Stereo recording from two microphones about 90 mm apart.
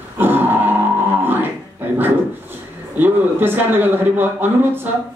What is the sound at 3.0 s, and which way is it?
A man's voice, 20° right (ahead or behind).